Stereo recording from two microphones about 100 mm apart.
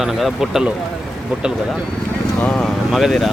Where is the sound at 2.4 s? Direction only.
10° left (ahead or behind).